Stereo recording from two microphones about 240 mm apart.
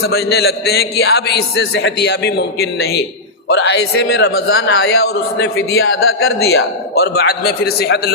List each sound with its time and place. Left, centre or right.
0.1 s a man's voice: left